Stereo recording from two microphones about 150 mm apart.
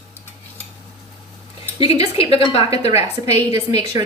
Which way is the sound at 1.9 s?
40° left (ahead or behind).